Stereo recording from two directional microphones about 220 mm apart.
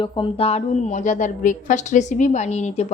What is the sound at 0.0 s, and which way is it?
A woman's voice, 25° left (ahead or behind).